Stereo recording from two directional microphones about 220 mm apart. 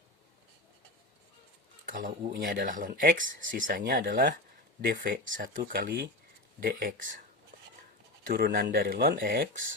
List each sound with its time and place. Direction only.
1.9 s speech: 40° right (ahead or behind)
8.3 s speech: 45° right (ahead or behind)